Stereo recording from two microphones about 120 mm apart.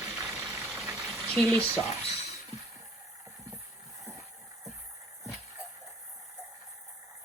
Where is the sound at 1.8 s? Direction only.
60° left (ahead or behind).